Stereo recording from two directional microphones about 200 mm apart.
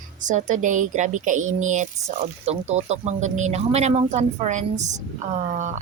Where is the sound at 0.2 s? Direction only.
40° right (ahead or behind).